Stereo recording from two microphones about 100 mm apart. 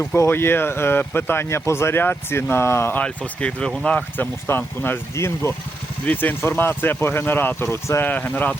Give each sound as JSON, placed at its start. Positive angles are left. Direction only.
{"t": 0.0, "sound": "speech", "side_deg": 20}
{"t": 3.0, "sound": "speech", "side_deg": 10}